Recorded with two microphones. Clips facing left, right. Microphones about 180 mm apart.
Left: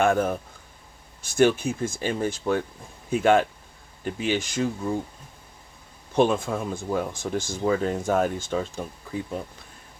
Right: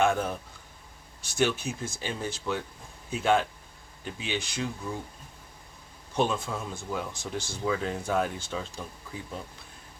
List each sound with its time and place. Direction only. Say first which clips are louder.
0.0 s speech: left 4 dB; 50° left (ahead or behind)
1.4 s speech: left 7 dB; 55° left (ahead or behind)
6.1 s speech: left 6 dB; 55° left (ahead or behind)